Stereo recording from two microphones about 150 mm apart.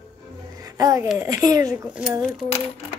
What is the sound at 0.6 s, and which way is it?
A child's voice, 25° right (ahead or behind).